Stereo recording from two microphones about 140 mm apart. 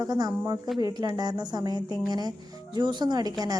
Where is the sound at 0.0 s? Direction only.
30° right (ahead or behind).